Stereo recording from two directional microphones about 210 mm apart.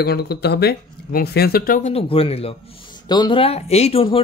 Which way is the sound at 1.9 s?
25° left (ahead or behind).